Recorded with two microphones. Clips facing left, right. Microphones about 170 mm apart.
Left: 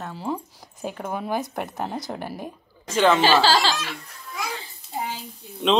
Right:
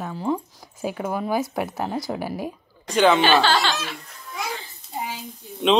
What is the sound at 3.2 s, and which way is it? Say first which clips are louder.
Speech: even; 35° left (ahead or behind).